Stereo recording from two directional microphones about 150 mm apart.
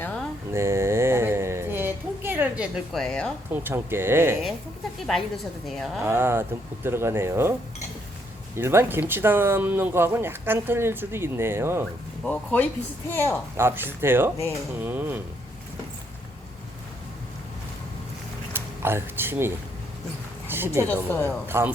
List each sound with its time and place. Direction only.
0.0 s a sound: 10° left (ahead or behind)
0.5 s a sound: 15° right (ahead or behind); by 3.3 s 5° left (ahead or behind)
3.5 s speech: 15° right (ahead or behind)
4.9 s a woman's voice: centre (ahead or behind)
6.1 s speech: 15° right (ahead or behind)
8.5 s speech: 15° right (ahead or behind)
12.2 s speech: 10° left (ahead or behind)
13.6 s speech: 15° right (ahead or behind)
18.5 s speech: 15° right (ahead or behind)
20.8 s speech: 10° left (ahead or behind)
21.4 s speech: 15° right (ahead or behind)